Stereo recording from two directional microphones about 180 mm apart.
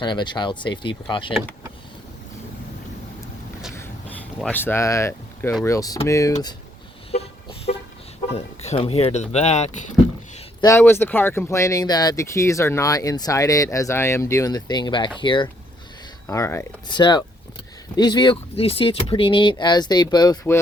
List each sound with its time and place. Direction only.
0.0 s speech: 25° left (ahead or behind)
3.8 s a sound: 10° left (ahead or behind)
4.5 s speech: 10° left (ahead or behind)
7.1 s a sound: 35° left (ahead or behind)
8.4 s speech: 35° left (ahead or behind)
10.6 s speech: 15° left (ahead or behind)
16.2 s speech: 15° left (ahead or behind)